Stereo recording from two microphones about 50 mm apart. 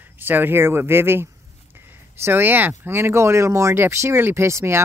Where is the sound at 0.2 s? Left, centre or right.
Right.